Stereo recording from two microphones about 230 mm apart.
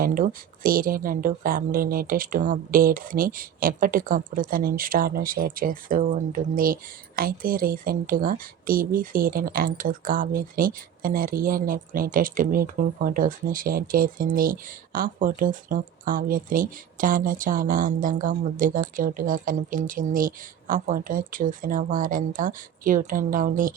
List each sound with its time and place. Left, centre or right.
0.0 s a woman's voice: right